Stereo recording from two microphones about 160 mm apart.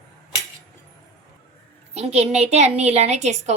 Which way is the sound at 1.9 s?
45° right (ahead or behind).